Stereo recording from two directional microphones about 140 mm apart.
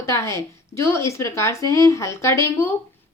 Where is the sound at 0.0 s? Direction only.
20° left (ahead or behind).